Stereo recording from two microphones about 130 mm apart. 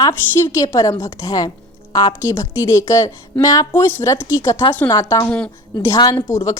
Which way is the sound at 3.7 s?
15° left (ahead or behind).